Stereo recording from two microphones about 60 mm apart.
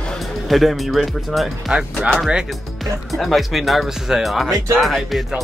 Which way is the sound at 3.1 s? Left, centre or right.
Centre.